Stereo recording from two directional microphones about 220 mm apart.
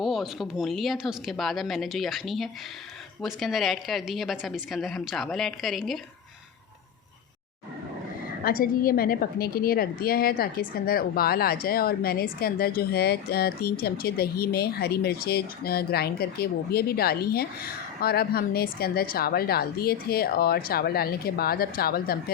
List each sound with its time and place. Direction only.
0.0 s a woman's voice: centre (ahead or behind)
8.4 s a woman's voice: 40° left (ahead or behind)